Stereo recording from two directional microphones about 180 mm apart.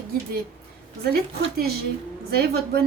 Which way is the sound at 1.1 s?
60° right (ahead or behind).